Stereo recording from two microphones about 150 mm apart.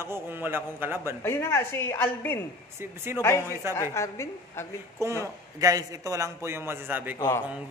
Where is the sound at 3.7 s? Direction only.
20° left (ahead or behind).